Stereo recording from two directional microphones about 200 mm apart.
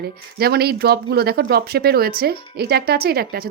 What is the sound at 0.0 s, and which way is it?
Speech, 50° right (ahead or behind).